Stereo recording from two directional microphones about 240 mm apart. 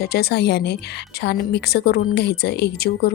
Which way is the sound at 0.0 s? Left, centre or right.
Left.